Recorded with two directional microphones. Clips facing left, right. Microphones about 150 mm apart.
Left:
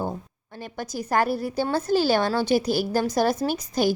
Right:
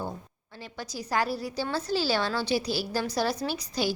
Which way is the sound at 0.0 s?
50° left (ahead or behind).